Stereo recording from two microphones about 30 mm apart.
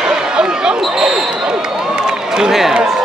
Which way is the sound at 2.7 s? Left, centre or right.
Centre.